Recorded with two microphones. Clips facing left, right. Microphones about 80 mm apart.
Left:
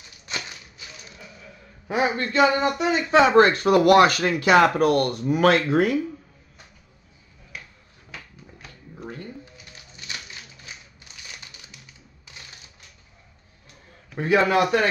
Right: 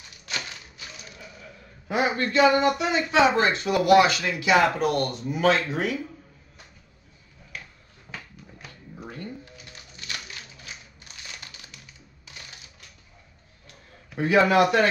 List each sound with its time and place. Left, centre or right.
1.9 s a man's voice: left
2.9 s speech: left
14.1 s a man's voice: left